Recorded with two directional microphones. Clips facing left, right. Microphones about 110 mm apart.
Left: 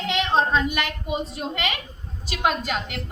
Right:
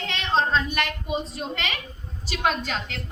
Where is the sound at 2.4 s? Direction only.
10° left (ahead or behind).